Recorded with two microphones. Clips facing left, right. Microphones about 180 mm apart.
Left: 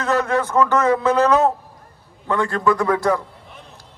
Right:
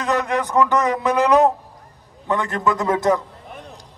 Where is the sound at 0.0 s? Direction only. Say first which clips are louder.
Left 2 dB; 15° right (ahead or behind).